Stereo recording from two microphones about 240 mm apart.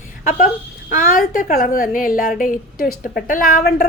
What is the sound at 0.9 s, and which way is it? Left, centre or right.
A woman's voice, left.